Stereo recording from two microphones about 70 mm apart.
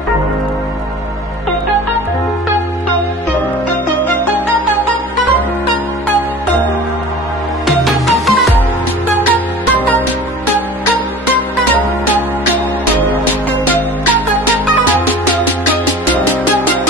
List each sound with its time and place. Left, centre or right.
7.6 s music: centre
9.3 s music: left